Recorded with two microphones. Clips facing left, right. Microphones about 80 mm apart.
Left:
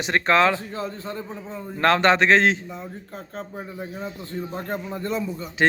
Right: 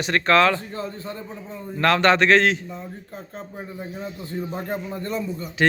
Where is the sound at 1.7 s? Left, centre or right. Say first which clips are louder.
Even; left.